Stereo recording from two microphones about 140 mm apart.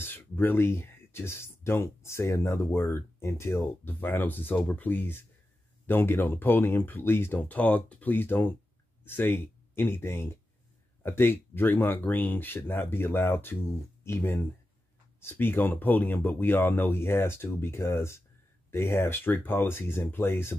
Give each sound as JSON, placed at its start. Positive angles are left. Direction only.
{"t": 0.0, "sound": "speech", "side_deg": 15}